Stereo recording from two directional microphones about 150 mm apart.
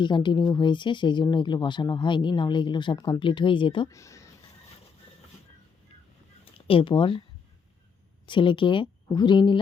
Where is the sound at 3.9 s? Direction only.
20° left (ahead or behind).